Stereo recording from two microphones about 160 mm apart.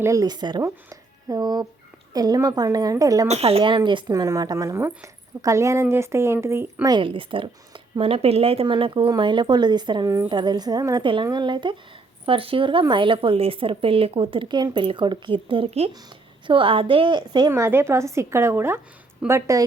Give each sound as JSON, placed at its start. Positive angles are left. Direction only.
{"t": 0.0, "sound": "speech", "side_deg": -20}
{"t": 3.2, "sound": "speech", "side_deg": -40}
{"t": 6.9, "sound": "speech", "side_deg": -30}
{"t": 17.5, "sound": "speech", "side_deg": -15}